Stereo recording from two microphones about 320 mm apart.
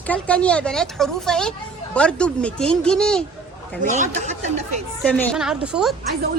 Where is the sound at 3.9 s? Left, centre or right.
Right.